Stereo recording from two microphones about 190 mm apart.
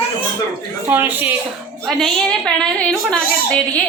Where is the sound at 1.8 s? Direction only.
Centre (ahead or behind).